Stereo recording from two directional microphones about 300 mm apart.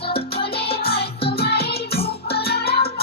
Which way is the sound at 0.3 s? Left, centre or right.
Left.